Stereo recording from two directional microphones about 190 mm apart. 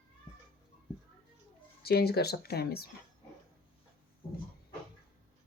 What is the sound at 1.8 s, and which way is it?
Speech, 55° left (ahead or behind).